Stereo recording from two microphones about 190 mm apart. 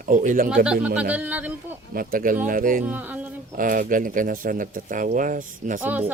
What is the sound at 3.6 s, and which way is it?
Speech, 45° right (ahead or behind).